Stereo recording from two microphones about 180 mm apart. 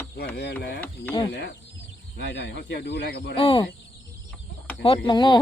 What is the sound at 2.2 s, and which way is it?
Speech, 75° left (ahead or behind).